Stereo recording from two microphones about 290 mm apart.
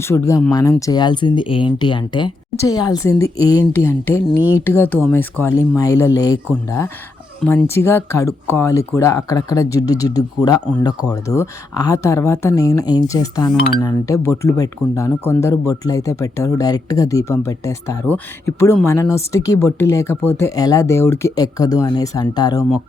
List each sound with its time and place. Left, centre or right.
0.1 s speech: centre